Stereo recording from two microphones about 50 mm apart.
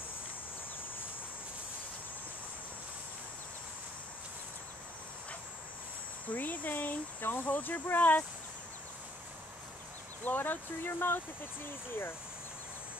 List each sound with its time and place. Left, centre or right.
6.2 s speech: left
10.2 s speech: left